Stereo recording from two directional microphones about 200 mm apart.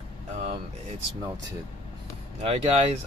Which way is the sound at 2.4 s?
30° right (ahead or behind).